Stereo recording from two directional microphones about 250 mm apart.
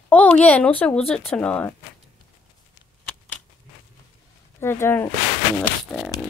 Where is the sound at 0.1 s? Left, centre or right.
Centre.